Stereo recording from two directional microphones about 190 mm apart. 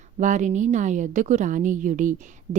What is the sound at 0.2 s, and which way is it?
A woman's voice, 40° right (ahead or behind).